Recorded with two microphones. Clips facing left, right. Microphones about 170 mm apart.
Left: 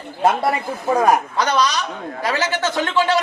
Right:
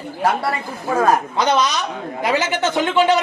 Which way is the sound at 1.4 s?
20° right (ahead or behind).